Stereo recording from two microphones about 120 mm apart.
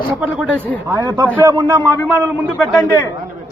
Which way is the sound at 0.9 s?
35° right (ahead or behind).